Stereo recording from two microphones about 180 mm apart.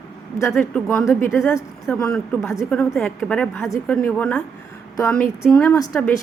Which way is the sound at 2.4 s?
15° left (ahead or behind).